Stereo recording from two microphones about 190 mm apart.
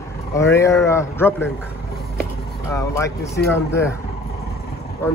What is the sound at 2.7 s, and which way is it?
Speech, 15° left (ahead or behind).